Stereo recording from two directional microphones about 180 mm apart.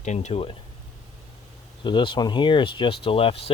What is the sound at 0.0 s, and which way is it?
Speech, 40° left (ahead or behind).